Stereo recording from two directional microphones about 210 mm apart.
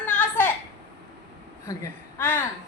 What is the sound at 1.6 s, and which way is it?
Speech, 10° left (ahead or behind).